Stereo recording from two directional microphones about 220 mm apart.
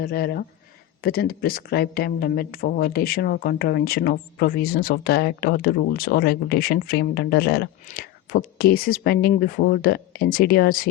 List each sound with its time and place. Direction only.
0.0 s speech: 45° left (ahead or behind)